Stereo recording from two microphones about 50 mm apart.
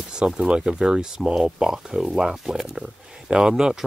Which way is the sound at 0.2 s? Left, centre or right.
Centre.